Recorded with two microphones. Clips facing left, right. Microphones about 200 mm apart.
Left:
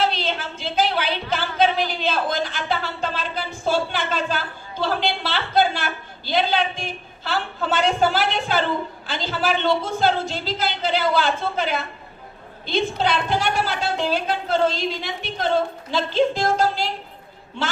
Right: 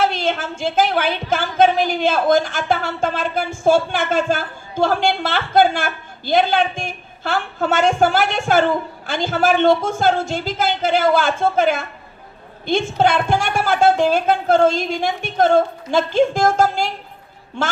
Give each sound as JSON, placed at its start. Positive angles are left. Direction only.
{"t": 0.0, "sound": "a woman's voice", "side_deg": -50}